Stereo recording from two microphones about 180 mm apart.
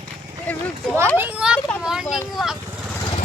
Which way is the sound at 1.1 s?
10° right (ahead or behind).